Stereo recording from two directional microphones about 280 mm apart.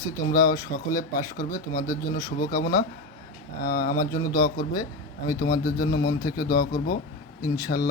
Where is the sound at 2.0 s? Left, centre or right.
Centre.